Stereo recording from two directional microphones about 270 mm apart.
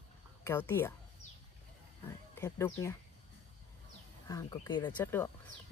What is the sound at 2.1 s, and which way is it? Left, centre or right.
Speech, centre.